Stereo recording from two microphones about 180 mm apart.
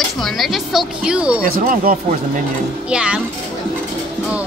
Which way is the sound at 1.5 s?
50° right (ahead or behind).